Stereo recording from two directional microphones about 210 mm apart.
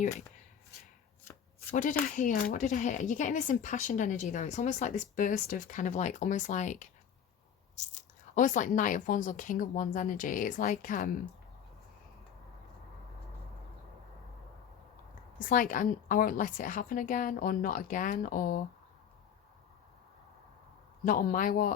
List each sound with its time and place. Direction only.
1.7 s speech: 40° left (ahead or behind)
7.9 s speech: 35° left (ahead or behind)
15.4 s speech: 40° left (ahead or behind)
21.0 s speech: 40° left (ahead or behind)